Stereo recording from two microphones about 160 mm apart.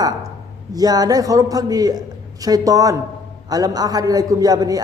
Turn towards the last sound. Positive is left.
turn(degrees=-25)  # may be behind; listen again after turning